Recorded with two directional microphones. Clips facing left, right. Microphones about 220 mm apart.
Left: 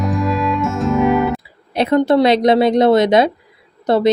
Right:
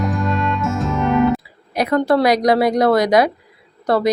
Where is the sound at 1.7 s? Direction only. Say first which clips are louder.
Left 3 dB; 25° left (ahead or behind).